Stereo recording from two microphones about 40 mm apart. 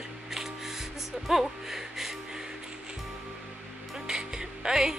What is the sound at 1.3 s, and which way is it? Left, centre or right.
Music, centre.